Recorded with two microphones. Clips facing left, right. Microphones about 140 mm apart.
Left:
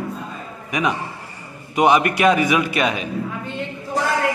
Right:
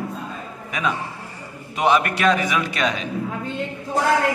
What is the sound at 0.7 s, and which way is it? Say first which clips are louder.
A man's voice: left 3 dB; 15° left (ahead or behind).